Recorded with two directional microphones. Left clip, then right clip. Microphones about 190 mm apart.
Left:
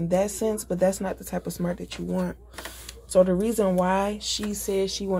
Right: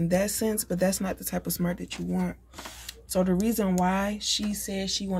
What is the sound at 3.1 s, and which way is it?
Speech, 10° right (ahead or behind).